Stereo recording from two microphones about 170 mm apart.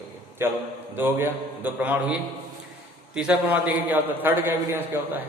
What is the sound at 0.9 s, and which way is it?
A man's voice, 10° right (ahead or behind).